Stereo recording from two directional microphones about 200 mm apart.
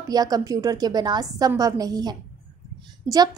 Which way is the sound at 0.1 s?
20° right (ahead or behind).